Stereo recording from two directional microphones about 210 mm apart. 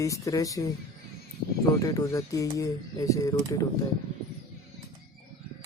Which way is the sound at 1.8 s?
15° left (ahead or behind).